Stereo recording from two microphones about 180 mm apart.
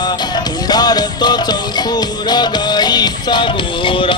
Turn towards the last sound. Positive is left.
turn(degrees=25)  # may be behind; listen again after turning